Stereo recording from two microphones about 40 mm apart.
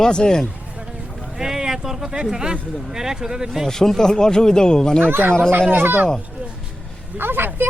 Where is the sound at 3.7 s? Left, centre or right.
Centre.